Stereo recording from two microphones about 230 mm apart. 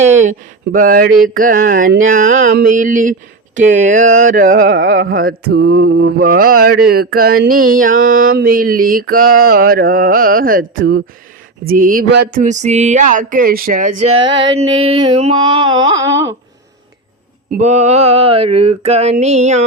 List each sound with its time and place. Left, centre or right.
0.2 s speech: right
1.4 s mantra: right
4.7 s carnatic music: right
5.5 s mantra: right
14.0 s a sound: right
17.5 s a sound: right